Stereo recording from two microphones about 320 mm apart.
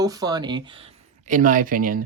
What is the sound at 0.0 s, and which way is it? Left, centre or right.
Speech, centre.